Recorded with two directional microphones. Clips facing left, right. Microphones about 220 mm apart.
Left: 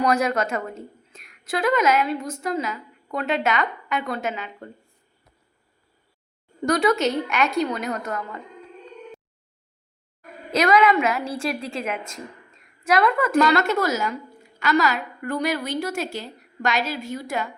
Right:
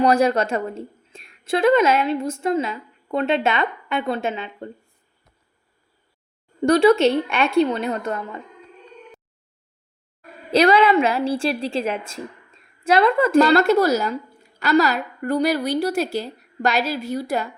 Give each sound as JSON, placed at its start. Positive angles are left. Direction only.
{"t": 0.0, "sound": "a woman's voice", "side_deg": -30}
{"t": 6.6, "sound": "a woman's voice", "side_deg": -30}
{"t": 10.5, "sound": "a woman's voice", "side_deg": -30}